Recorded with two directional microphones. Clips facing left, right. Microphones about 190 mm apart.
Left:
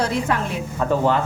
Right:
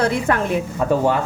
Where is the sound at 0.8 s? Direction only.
10° right (ahead or behind).